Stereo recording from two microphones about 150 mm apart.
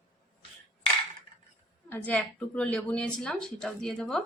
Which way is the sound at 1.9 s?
10° left (ahead or behind).